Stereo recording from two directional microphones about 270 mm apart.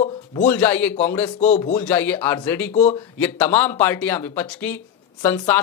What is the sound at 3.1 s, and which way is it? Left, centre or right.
Speech, centre.